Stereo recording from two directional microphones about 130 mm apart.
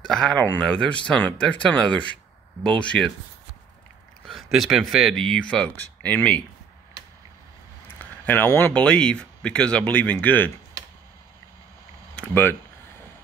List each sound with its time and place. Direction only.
0.0 s speech: 5° left (ahead or behind)
4.3 s speech: centre (ahead or behind)
8.0 s speech: 15° left (ahead or behind)
12.2 s speech: 15° left (ahead or behind)